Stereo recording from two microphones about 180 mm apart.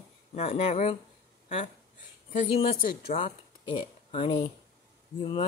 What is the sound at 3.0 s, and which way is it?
Speech, 35° left (ahead or behind).